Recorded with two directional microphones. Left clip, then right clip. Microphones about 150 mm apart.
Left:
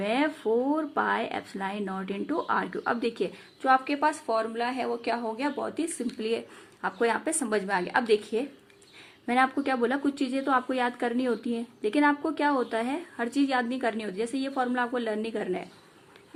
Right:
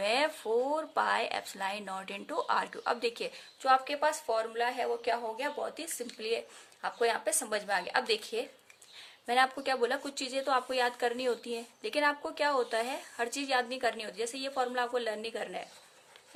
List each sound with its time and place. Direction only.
0.0 s a woman's voice: 40° right (ahead or behind)